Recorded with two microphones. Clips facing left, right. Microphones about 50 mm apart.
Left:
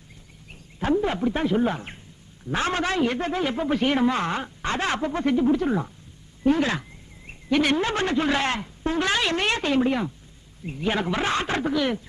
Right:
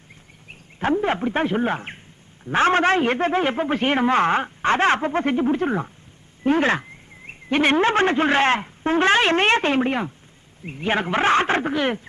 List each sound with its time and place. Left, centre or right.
0.9 s a man's voice: right